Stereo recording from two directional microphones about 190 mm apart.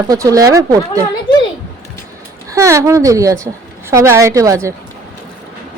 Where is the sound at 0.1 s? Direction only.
20° right (ahead or behind).